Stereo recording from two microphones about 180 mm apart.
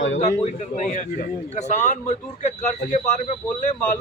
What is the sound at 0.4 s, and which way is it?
Speech, 40° left (ahead or behind).